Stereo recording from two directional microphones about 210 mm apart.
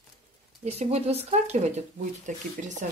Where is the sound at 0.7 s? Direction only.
30° right (ahead or behind).